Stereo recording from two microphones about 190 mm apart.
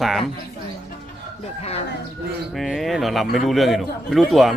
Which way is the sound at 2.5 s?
Centre (ahead or behind).